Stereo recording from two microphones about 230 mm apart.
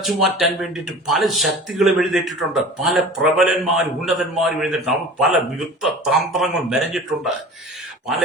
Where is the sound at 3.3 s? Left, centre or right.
Centre.